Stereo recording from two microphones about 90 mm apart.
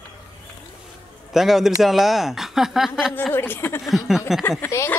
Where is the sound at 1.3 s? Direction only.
5° right (ahead or behind).